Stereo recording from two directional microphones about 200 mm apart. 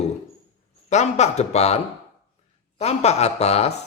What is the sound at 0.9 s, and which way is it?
Speech, 35° left (ahead or behind).